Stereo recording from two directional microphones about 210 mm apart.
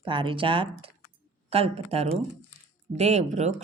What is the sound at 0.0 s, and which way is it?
A woman's voice, 25° right (ahead or behind).